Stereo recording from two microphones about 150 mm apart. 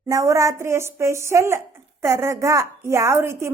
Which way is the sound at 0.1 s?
20° right (ahead or behind).